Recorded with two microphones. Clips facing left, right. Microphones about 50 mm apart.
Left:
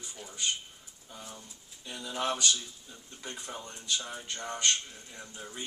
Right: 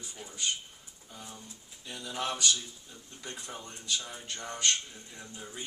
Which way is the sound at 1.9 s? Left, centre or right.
Centre.